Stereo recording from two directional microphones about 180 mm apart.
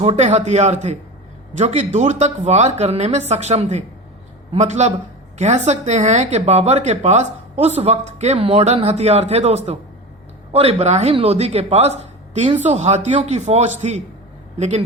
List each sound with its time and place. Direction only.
0.0 s speech: 40° right (ahead or behind)